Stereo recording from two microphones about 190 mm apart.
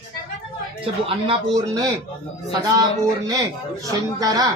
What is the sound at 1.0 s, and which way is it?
Speech, 30° right (ahead or behind).